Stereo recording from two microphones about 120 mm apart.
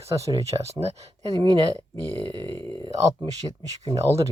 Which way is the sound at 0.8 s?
60° right (ahead or behind).